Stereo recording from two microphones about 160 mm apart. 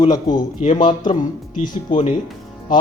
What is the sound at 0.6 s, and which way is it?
Speech, 45° left (ahead or behind).